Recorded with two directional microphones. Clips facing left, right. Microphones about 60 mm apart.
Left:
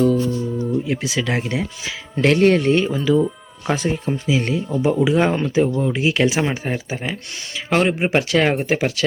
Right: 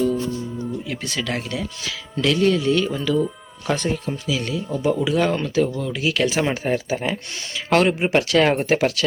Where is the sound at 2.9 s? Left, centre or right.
Centre; by 4.6 s left.